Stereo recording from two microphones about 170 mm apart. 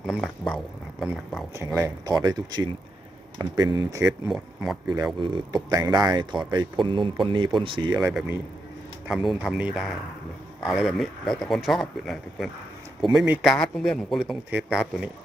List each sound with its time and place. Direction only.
0.0 s speech: centre (ahead or behind)
1.5 s speech: 15° right (ahead or behind)
4.3 s speech: centre (ahead or behind)
5.2 s speech: 30° right (ahead or behind)
9.0 s speech: centre (ahead or behind)